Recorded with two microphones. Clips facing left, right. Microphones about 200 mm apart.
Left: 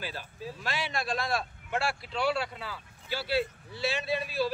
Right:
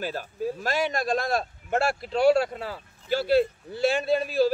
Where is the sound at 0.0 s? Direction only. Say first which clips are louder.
Right 9 dB; 45° right (ahead or behind).